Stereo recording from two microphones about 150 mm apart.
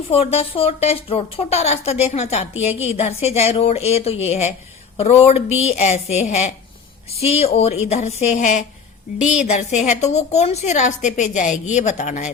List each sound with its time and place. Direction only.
0.1 s a woman's voice: 40° left (ahead or behind)